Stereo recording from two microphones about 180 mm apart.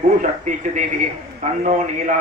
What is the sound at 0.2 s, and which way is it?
A man's voice, 45° right (ahead or behind).